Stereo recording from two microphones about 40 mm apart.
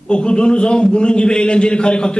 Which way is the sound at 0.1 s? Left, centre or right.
Left.